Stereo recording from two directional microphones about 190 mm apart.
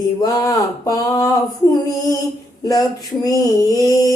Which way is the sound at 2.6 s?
20° left (ahead or behind).